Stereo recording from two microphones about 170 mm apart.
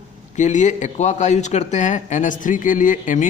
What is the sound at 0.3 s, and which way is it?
Speech, 45° left (ahead or behind).